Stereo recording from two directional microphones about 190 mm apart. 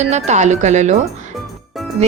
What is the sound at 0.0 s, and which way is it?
Speech, 35° right (ahead or behind).